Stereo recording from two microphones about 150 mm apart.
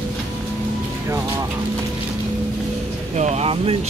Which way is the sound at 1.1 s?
20° right (ahead or behind).